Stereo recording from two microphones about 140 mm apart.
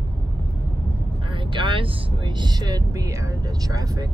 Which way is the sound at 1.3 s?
35° right (ahead or behind).